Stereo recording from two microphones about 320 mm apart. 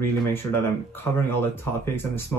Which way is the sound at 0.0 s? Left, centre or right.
Centre.